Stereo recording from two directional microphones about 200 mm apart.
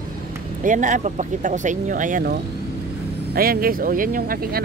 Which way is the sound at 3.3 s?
45° right (ahead or behind).